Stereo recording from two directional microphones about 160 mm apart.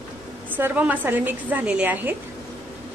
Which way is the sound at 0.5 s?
10° right (ahead or behind).